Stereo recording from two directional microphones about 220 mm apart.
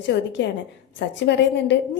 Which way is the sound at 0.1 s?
50° left (ahead or behind).